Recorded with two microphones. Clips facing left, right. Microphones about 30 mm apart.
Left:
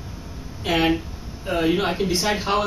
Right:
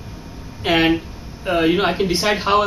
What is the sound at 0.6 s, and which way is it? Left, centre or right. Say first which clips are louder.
Speech: right 4 dB; right.